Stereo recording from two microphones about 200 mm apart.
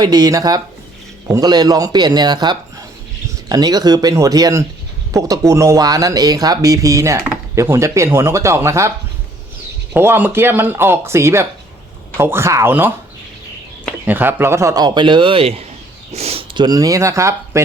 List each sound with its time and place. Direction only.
0.0 s speech: 20° right (ahead or behind)
9.9 s speech: 10° right (ahead or behind)
14.0 s speech: 10° right (ahead or behind)